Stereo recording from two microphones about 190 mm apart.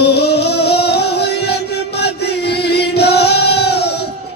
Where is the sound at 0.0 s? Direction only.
60° left (ahead or behind).